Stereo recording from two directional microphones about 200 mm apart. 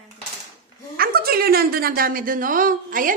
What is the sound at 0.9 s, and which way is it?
A woman's voice, 50° right (ahead or behind).